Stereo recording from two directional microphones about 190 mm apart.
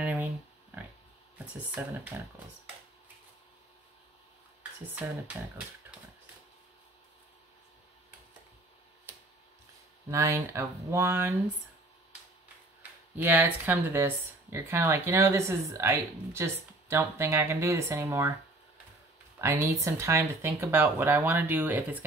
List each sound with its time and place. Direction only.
0.0 s a sound: 10° right (ahead or behind)
1.8 s speech: 10° right (ahead or behind)
10.0 s speech: 15° right (ahead or behind)
13.1 s speech: 10° right (ahead or behind)
19.3 s speech: 15° right (ahead or behind)